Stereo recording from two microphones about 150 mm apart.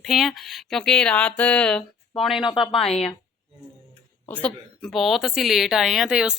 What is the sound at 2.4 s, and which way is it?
Speech, 35° left (ahead or behind).